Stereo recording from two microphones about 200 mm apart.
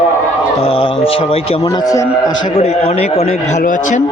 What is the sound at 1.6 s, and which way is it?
Speech, 20° left (ahead or behind).